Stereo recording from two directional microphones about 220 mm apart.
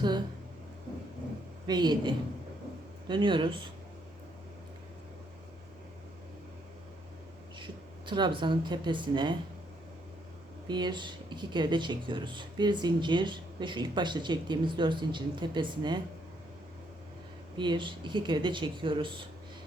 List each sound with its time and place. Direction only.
1.6 s speech: 20° right (ahead or behind)
7.6 s speech: 20° right (ahead or behind)
10.7 s speech: 20° right (ahead or behind)
17.6 s speech: 20° right (ahead or behind)